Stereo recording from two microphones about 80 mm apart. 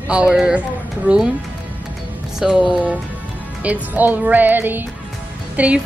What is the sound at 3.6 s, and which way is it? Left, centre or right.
Music, centre.